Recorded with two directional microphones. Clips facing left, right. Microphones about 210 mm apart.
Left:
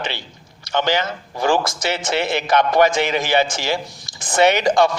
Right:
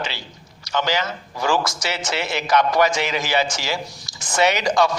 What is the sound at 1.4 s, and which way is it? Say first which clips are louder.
A man's voice: left 3 dB; 55° left (ahead or behind).